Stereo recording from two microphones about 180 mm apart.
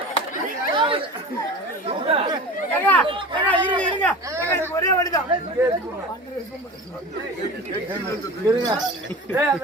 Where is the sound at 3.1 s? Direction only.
30° right (ahead or behind).